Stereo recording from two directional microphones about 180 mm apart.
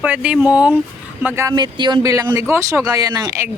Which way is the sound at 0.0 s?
10° right (ahead or behind).